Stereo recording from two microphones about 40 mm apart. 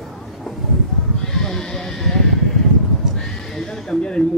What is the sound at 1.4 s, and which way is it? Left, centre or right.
Bleat, centre.